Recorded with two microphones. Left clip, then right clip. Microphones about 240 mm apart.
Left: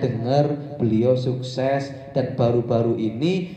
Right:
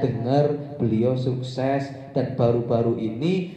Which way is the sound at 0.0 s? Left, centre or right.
Left.